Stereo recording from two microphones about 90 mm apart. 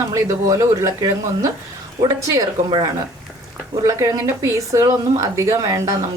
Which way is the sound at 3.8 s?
40° right (ahead or behind).